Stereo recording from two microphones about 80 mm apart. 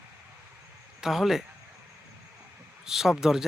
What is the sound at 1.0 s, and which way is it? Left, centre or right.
Speech, centre.